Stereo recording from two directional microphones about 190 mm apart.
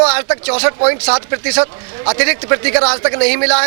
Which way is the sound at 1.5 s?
30° right (ahead or behind).